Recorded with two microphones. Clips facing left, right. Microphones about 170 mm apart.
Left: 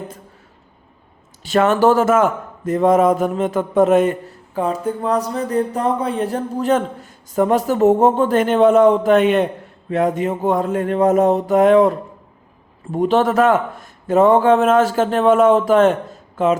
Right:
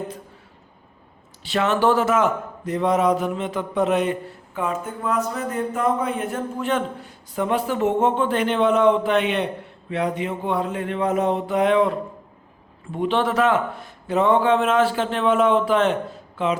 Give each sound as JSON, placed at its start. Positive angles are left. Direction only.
{"t": 1.5, "sound": "a man's voice", "side_deg": 50}